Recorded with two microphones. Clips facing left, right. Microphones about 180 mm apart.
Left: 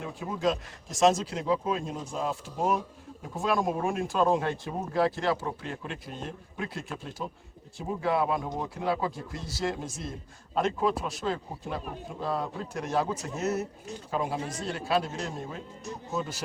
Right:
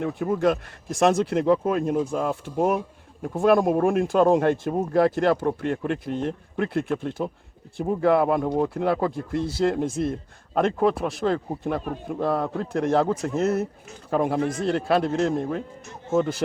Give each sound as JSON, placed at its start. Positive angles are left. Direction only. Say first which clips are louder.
{"t": 0.0, "sound": "speech", "louder": "right 7 dB", "side_deg": -60}